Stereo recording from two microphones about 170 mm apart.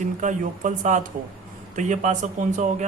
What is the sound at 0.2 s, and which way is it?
Speech, 50° right (ahead or behind).